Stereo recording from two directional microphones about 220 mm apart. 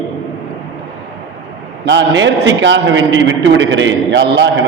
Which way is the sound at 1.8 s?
55° right (ahead or behind).